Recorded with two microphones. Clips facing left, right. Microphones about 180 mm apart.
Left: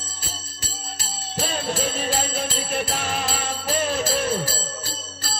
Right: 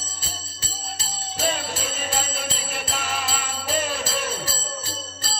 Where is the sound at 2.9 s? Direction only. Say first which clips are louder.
Left 2 dB; 35° left (ahead or behind).